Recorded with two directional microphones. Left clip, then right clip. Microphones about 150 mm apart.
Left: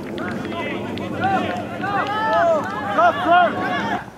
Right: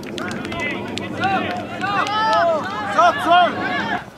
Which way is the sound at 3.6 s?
Centre (ahead or behind).